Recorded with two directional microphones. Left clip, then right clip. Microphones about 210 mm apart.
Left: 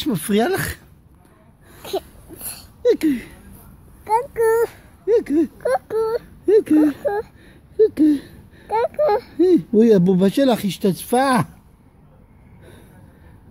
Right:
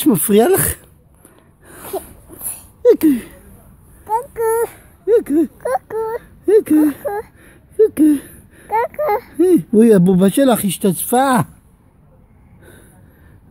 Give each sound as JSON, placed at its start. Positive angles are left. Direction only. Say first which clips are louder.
{"t": 0.0, "sound": "speech", "louder": "right 7 dB", "side_deg": -45}
{"t": 1.9, "sound": "a sound", "louder": "even", "side_deg": 0}
{"t": 2.8, "sound": "speech", "louder": "right 6 dB", "side_deg": -45}
{"t": 4.0, "sound": "a sound", "louder": "left 1 dB", "side_deg": -15}
{"t": 5.0, "sound": "speech", "louder": "right 3 dB", "side_deg": -45}
{"t": 5.6, "sound": "speech", "louder": "even", "side_deg": -10}
{"t": 6.4, "sound": "speech", "louder": "right 3 dB", "side_deg": -40}
{"t": 7.4, "sound": "a sound", "louder": "right 3 dB", "side_deg": -45}
{"t": 8.6, "sound": "speech", "louder": "right 1 dB", "side_deg": -15}
{"t": 9.3, "sound": "speech", "louder": "right 3 dB", "side_deg": -45}